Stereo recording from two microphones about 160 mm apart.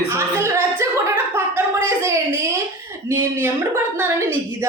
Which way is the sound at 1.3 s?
15° right (ahead or behind).